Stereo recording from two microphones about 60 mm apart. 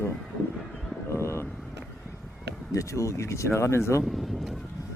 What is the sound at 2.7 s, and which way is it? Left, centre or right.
Speech, left.